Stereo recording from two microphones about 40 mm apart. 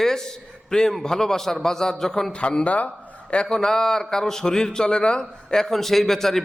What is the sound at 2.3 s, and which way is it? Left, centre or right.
Speech, left.